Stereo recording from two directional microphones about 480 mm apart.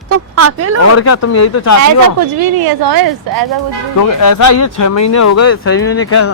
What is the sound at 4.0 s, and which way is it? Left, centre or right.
Speech, left.